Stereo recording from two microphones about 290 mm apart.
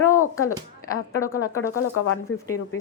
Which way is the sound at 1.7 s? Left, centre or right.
Left.